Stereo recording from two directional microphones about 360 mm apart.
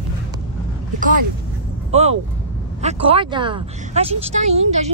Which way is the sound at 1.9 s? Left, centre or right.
Centre.